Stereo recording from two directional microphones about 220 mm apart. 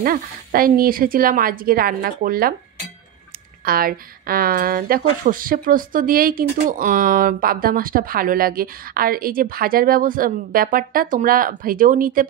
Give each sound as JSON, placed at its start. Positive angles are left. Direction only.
{"t": 0.0, "sound": "speech", "side_deg": -40}
{"t": 3.6, "sound": "speech", "side_deg": -40}